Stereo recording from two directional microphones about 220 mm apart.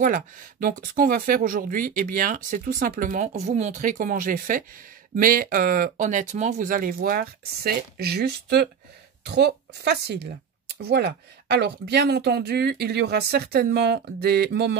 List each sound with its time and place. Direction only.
0.0 s speech: 40° right (ahead or behind)